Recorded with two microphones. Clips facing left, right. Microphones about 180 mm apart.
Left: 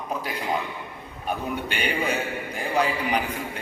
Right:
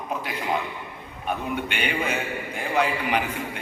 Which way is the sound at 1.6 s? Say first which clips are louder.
Left 1 dB; 35° left (ahead or behind).